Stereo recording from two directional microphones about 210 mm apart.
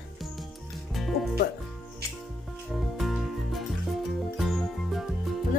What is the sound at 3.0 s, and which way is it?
Music, centre (ahead or behind).